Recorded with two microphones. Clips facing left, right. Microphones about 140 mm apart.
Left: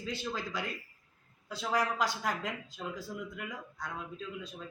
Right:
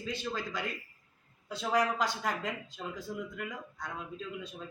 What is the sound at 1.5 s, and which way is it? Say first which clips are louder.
A man's voice: right 2 dB; 5° left (ahead or behind).